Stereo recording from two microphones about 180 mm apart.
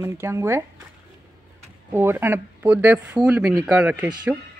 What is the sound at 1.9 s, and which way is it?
Speech, 10° right (ahead or behind).